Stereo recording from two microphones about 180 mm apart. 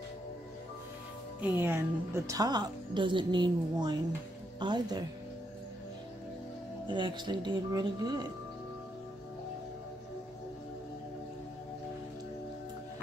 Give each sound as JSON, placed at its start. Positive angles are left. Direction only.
{"t": 1.6, "sound": "a woman's voice", "side_deg": -15}
{"t": 6.9, "sound": "a woman's voice", "side_deg": -25}